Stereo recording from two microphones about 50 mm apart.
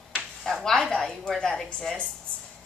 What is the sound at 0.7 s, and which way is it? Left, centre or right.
A woman's voice, centre.